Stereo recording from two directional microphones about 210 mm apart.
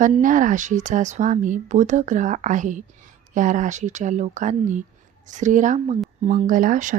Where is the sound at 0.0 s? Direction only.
40° right (ahead or behind).